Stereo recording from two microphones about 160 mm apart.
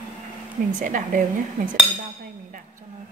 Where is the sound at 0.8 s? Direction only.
55° right (ahead or behind).